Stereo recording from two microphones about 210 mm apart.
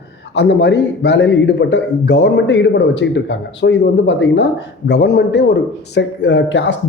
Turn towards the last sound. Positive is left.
turn(degrees=60)  # may be behind; listen again after turning